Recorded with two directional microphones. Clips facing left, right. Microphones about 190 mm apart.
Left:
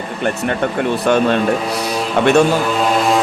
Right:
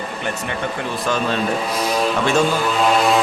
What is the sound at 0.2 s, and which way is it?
Speech, 60° left (ahead or behind).